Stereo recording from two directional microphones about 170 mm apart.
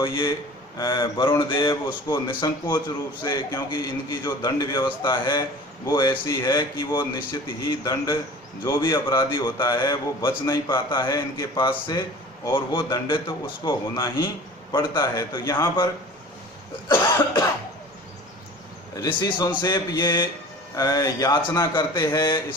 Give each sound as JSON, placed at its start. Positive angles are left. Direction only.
{"t": 0.0, "sound": "a man's voice", "side_deg": 25}
{"t": 16.9, "sound": "cough", "side_deg": 15}
{"t": 18.9, "sound": "a man's voice", "side_deg": 20}